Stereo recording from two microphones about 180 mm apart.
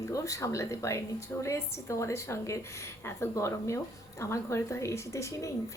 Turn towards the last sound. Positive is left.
turn(degrees=15)  # may be behind; listen again after turning